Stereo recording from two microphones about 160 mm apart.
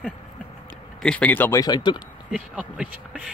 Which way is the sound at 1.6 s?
25° left (ahead or behind).